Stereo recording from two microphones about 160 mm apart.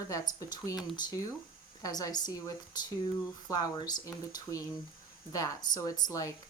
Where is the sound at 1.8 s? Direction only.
25° left (ahead or behind).